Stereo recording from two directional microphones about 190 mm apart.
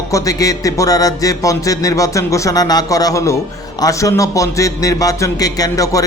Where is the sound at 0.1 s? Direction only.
20° left (ahead or behind).